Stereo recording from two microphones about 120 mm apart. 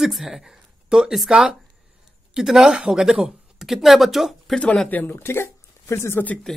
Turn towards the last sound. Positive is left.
turn(degrees=20)  # may be behind; listen again after turning